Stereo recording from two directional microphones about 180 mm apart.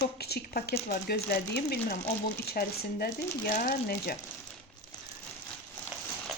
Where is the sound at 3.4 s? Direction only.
50° left (ahead or behind).